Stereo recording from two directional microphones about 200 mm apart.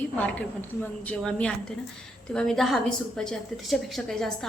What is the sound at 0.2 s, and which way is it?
A woman's voice, 5° left (ahead or behind).